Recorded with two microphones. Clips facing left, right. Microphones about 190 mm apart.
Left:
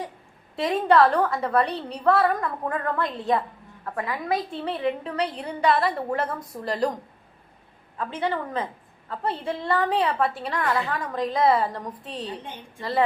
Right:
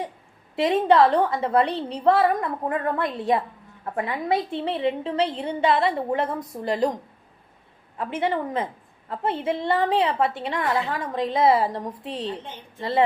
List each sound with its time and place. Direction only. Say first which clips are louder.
0.5 s a woman's voice: right 2 dB; 25° right (ahead or behind)
7.9 s a woman's voice: right 2 dB; 25° right (ahead or behind)